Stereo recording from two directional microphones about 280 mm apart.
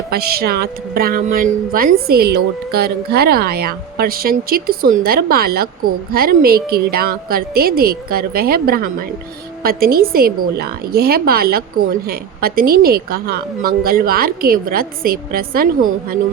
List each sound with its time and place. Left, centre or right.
0.1 s speech: right